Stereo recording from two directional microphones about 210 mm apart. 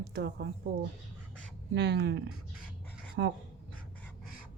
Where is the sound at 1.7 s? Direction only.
55° right (ahead or behind).